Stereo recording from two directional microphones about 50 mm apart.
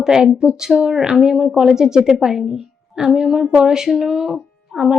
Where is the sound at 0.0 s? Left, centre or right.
Centre.